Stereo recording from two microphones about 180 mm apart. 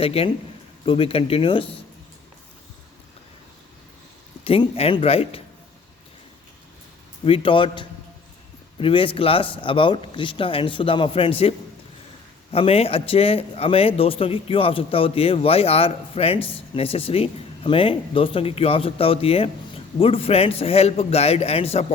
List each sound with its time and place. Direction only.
0.0 s speech: 30° left (ahead or behind)
4.4 s speech: 30° left (ahead or behind)
7.3 s speech: 30° left (ahead or behind)